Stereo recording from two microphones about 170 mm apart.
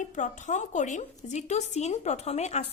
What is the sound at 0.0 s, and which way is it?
A woman's voice, 45° left (ahead or behind).